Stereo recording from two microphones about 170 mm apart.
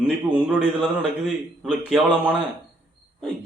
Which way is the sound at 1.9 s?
10° right (ahead or behind).